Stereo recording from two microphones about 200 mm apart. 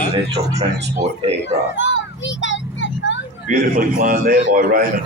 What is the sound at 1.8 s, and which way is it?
Vehicle, 65° left (ahead or behind).